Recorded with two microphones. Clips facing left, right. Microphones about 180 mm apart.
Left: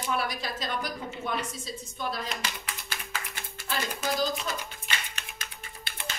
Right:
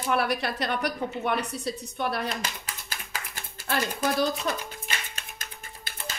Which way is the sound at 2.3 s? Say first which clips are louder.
Right 2 dB; 35° right (ahead or behind).